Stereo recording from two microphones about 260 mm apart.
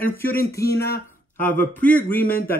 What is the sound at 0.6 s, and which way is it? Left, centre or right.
Speech, left.